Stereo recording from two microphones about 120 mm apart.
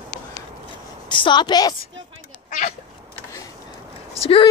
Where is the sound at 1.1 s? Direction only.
40° left (ahead or behind).